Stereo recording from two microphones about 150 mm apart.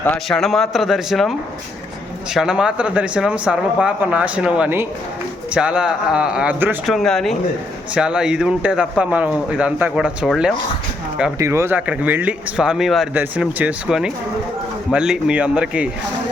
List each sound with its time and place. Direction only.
0.3 s speech: centre (ahead or behind)
6.8 s speech: centre (ahead or behind)
11.3 s speech: 20° right (ahead or behind)